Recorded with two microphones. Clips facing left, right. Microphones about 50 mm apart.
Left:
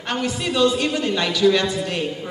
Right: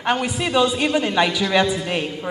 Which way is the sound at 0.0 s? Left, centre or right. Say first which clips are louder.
Right 3 dB; centre.